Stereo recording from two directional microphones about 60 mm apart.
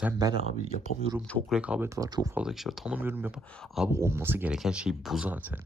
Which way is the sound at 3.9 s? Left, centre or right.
Right.